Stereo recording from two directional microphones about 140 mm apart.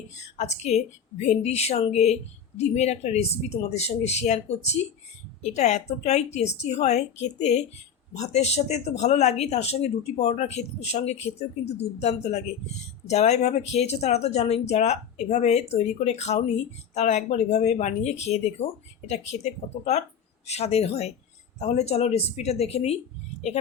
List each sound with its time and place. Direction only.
0.3 s speech: 55° left (ahead or behind)